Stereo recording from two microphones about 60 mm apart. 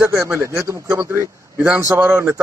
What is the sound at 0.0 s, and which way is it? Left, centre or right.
Speech, right.